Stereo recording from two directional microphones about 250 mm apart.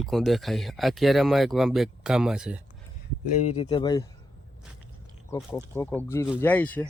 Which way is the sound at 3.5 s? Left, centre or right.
Centre.